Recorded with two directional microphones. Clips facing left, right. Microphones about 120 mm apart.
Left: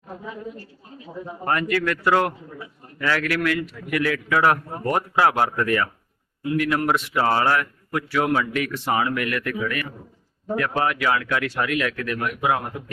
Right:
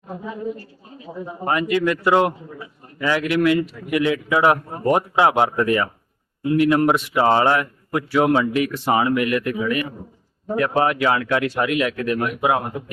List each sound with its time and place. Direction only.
1.5 s a man's voice: 15° right (ahead or behind)